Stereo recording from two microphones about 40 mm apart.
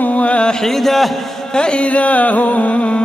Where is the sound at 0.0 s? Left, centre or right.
Left.